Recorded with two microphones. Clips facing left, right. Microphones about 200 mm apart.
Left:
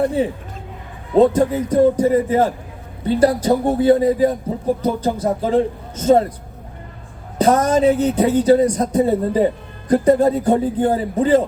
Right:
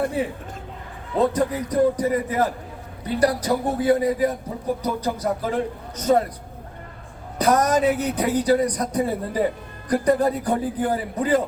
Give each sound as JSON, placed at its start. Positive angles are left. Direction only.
{"t": 0.2, "sound": "speech", "side_deg": 25}
{"t": 7.3, "sound": "speech", "side_deg": 25}